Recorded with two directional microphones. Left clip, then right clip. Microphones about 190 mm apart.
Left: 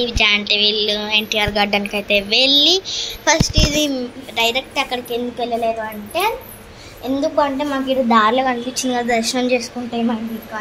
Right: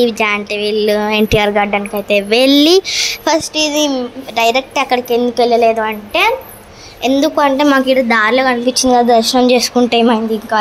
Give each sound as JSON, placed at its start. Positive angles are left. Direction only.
{"t": 0.0, "sound": "a woman's voice", "side_deg": -40}
{"t": 1.5, "sound": "a child's voice", "side_deg": 0}
{"t": 2.2, "sound": "speech", "side_deg": -55}
{"t": 3.5, "sound": "a child's voice", "side_deg": -5}
{"t": 4.4, "sound": "a woman's voice", "side_deg": -30}
{"t": 5.4, "sound": "a woman's voice", "side_deg": -50}
{"t": 6.1, "sound": "a woman's voice", "side_deg": -40}
{"t": 8.1, "sound": "a woman's voice", "side_deg": -10}
{"t": 8.9, "sound": "a woman's voice", "side_deg": -25}
{"t": 9.6, "sound": "a woman's voice", "side_deg": -45}